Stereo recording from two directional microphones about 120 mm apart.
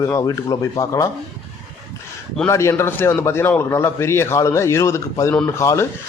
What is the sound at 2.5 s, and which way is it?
A man's voice, 25° left (ahead or behind).